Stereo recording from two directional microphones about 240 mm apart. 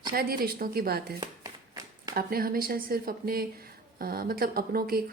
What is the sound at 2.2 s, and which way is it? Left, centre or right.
A woman's voice, right.